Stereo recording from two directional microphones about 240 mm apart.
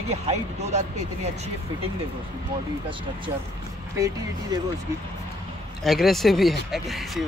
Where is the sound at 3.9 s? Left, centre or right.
Centre.